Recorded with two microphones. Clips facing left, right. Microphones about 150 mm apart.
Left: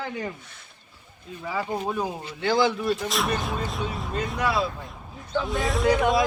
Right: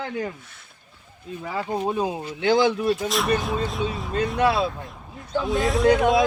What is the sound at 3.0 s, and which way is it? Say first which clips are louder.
Speech: right 4 dB; centre (ahead or behind).